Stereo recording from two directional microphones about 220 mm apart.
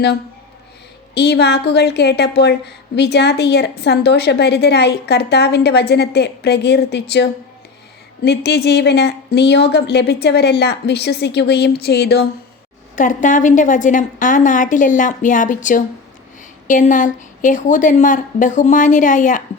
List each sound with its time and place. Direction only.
1.1 s a woman's voice: 50° left (ahead or behind)
13.0 s a woman's voice: 35° left (ahead or behind)